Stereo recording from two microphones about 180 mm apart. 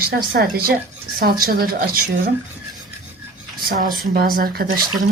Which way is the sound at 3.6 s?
55° right (ahead or behind).